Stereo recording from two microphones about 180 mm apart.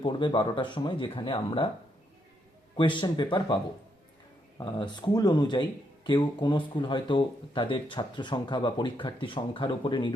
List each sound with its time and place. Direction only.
0.0 s speech: 25° left (ahead or behind)
2.7 s speech: 25° left (ahead or behind)